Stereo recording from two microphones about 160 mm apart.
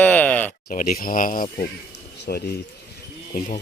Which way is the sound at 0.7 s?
55° left (ahead or behind).